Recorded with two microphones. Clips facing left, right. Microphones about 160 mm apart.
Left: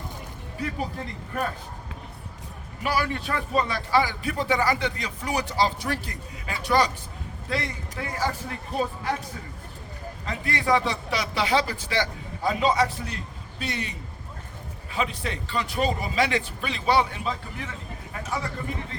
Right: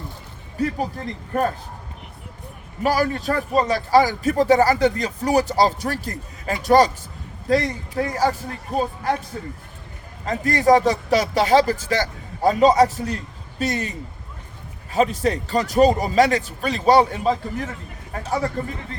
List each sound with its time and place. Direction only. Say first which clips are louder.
1.3 s a man's voice: right 8 dB; 40° right (ahead or behind)
2.8 s a man's voice: right 7 dB; 40° right (ahead or behind)
14.9 s a man's voice: right 10 dB; 40° right (ahead or behind)